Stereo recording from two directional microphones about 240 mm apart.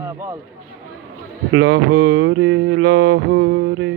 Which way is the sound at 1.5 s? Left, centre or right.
Right.